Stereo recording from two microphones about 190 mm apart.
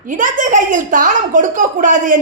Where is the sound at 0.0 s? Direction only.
45° right (ahead or behind).